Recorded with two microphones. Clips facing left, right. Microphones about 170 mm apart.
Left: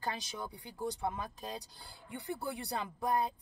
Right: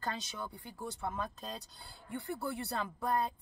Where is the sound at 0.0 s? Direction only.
10° left (ahead or behind).